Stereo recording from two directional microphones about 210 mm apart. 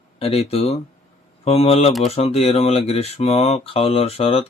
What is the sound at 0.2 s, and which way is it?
Speech, 30° left (ahead or behind).